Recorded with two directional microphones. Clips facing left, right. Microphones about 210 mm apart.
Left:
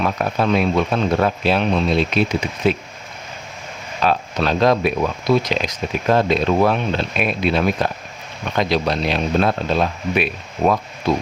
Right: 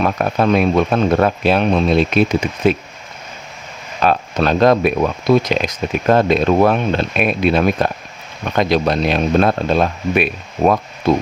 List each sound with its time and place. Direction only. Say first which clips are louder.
0.0 s speech: right 3 dB; 50° right (ahead or behind)
4.0 s speech: right 3 dB; 50° right (ahead or behind)